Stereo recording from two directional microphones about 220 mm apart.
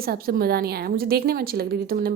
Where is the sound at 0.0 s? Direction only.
45° right (ahead or behind).